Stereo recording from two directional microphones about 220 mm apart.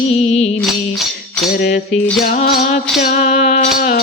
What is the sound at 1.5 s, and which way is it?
Music, 45° left (ahead or behind).